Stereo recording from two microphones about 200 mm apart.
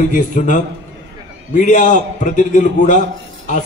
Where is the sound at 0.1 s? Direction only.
40° left (ahead or behind).